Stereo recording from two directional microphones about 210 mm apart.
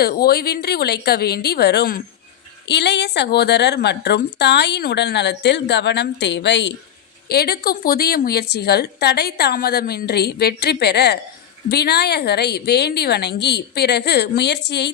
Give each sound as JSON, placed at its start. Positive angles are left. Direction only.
{"t": 0.0, "sound": "a woman's voice", "side_deg": 45}